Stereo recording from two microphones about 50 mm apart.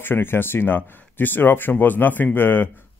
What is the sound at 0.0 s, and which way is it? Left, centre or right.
Speech, left.